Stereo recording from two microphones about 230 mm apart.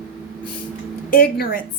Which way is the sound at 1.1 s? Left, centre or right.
Left.